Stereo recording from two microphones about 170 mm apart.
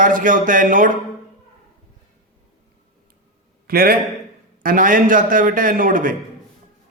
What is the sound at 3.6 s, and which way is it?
A man's voice, 60° right (ahead or behind).